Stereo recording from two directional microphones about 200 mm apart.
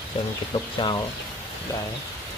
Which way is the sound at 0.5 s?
25° left (ahead or behind).